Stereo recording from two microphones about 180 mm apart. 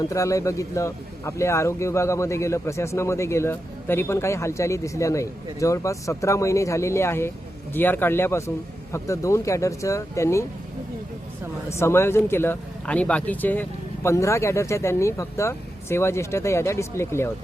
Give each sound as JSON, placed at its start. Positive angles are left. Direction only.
{"t": 0.0, "sound": "a man's voice", "side_deg": 15}
{"t": 11.7, "sound": "a man's voice", "side_deg": 15}